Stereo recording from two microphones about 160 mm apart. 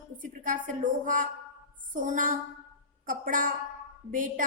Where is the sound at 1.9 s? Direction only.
55° right (ahead or behind).